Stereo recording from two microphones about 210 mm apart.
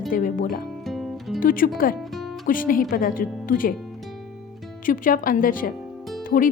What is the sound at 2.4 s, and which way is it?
A woman's voice, 40° left (ahead or behind).